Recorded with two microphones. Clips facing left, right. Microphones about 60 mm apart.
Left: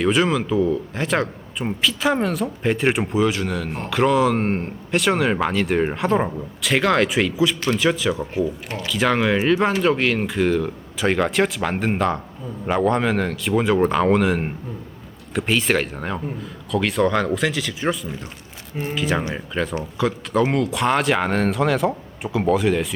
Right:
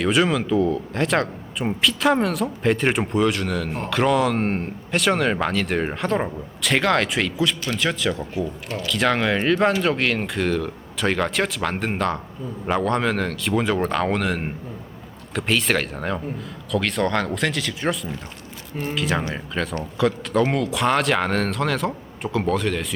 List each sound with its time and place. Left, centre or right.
0.0 s a man's voice: centre
8.4 s speech: centre
8.9 s a man's voice: centre